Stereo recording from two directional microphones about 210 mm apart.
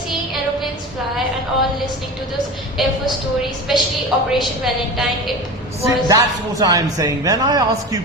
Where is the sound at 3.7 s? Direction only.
Centre (ahead or behind).